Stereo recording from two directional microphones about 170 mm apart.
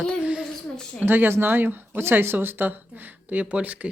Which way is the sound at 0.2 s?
5° right (ahead or behind).